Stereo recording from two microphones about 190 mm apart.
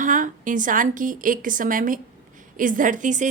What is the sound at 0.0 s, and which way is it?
A woman's voice, 45° right (ahead or behind).